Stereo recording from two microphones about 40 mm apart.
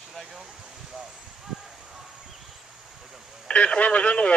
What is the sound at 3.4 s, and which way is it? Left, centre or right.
Speech, left.